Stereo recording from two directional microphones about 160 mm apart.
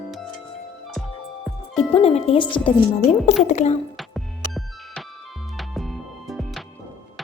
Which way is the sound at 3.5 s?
45° left (ahead or behind).